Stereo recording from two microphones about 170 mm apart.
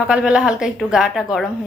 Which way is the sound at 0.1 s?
5° right (ahead or behind).